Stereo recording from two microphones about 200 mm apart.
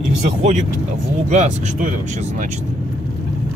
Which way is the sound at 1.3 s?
35° right (ahead or behind).